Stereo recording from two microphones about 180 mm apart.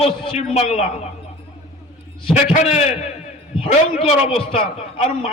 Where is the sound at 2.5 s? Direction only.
40° left (ahead or behind).